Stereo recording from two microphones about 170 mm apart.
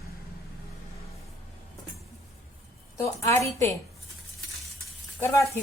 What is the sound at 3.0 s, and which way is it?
Speech, 15° left (ahead or behind).